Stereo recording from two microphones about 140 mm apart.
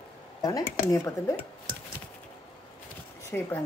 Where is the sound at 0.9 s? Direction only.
20° left (ahead or behind).